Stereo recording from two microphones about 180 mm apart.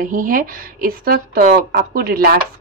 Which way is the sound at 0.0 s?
50° right (ahead or behind).